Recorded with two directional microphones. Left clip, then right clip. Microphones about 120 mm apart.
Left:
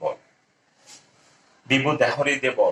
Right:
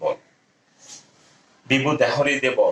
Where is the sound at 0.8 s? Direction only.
40° right (ahead or behind).